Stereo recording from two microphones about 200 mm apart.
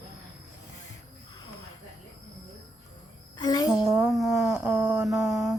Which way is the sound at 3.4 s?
20° left (ahead or behind).